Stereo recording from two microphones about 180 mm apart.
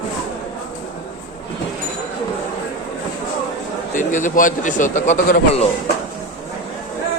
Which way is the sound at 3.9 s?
45° left (ahead or behind).